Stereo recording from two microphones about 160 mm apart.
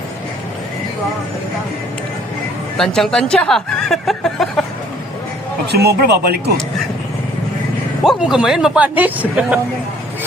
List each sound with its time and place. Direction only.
2.7 s speech: 5° left (ahead or behind)
5.7 s speech: 80° right
8.0 s speech: centre (ahead or behind)